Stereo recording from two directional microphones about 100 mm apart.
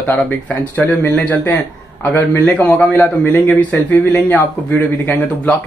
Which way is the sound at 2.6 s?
20° left (ahead or behind).